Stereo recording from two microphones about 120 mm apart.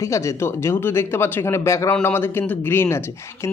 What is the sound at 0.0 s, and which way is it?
A man's voice, 25° left (ahead or behind).